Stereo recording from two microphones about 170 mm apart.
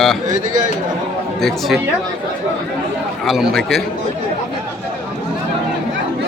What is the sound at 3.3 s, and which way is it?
Speech, centre (ahead or behind).